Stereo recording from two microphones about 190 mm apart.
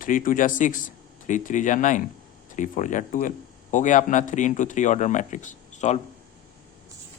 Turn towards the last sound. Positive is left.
turn(degrees=40)  # may be behind; listen again after turning